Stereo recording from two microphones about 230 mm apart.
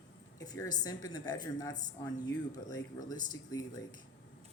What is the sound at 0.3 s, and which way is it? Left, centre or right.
Speech, centre.